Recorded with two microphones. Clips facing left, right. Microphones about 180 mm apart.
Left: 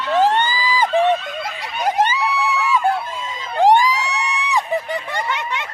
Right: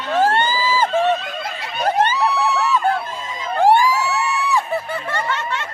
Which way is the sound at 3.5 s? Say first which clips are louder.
Even; 15° left (ahead or behind).